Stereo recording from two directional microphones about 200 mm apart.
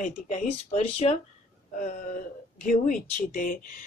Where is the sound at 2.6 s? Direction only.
40° left (ahead or behind).